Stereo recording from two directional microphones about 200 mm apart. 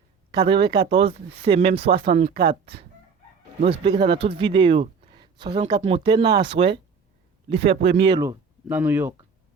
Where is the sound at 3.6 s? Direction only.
25° right (ahead or behind); by 9.1 s 10° right (ahead or behind).